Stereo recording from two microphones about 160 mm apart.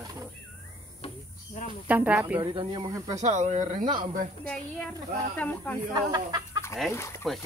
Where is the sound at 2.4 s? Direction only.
30° right (ahead or behind).